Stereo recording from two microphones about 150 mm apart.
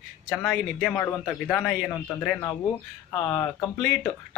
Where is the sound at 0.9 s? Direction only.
15° left (ahead or behind).